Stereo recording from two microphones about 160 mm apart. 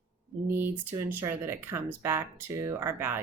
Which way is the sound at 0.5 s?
15° right (ahead or behind).